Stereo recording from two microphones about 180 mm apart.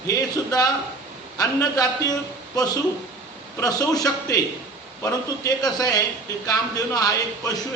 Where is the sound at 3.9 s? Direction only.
20° left (ahead or behind).